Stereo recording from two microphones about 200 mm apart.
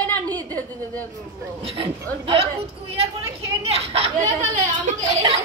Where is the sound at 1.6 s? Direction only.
30° right (ahead or behind).